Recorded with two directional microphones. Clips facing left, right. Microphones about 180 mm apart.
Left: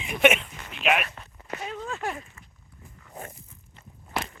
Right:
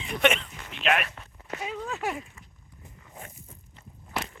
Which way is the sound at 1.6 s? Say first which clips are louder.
Right 1 dB; 5° right (ahead or behind).